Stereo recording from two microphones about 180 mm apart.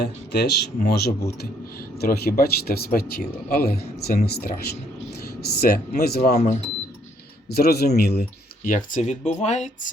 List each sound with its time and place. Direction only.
0.0 s speech: 60° left (ahead or behind)
7.5 s speech: 60° left (ahead or behind); by 9.9 s 40° left (ahead or behind)